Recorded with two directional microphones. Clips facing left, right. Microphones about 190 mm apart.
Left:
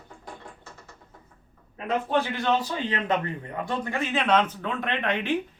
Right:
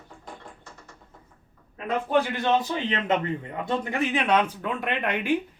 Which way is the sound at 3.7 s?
15° right (ahead or behind).